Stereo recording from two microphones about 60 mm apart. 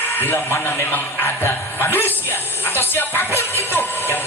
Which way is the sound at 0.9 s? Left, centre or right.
Left.